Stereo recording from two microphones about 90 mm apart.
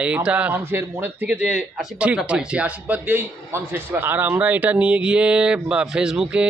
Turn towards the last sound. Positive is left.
turn(degrees=-10)  # may be behind; listen again after turning